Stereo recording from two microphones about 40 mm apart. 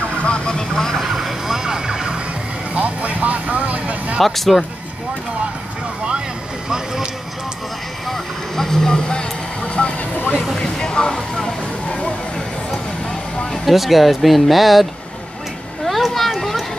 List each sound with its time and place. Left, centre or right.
0.2 s vehicle: left
1.1 s vehicle: centre
2.7 s vehicle: right
4.2 s speech: centre
6.7 s a sound: centre
8.1 s vehicle: centre; by 10.3 s left
10.6 s a sound: left
11.4 s music: centre
13.5 s speech: centre
15.8 s a sound: centre